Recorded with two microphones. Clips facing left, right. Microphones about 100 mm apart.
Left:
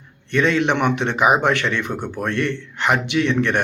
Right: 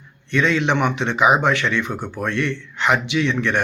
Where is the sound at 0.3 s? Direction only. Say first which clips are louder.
Left 1 dB; 50° left (ahead or behind).